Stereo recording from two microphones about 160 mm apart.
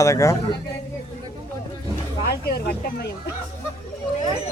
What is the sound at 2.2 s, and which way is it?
Speech, 80° left.